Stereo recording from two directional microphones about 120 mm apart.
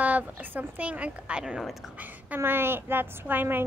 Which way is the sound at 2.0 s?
15° right (ahead or behind).